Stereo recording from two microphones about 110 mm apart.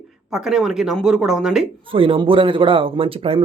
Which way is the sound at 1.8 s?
55° right (ahead or behind).